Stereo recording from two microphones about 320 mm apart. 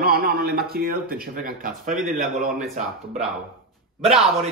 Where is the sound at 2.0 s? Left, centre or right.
Centre.